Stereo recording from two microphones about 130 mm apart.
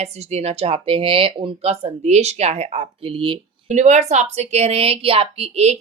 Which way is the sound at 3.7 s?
65° right (ahead or behind).